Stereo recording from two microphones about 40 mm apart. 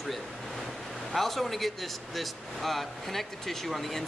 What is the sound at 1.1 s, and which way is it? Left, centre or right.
A man's voice, centre.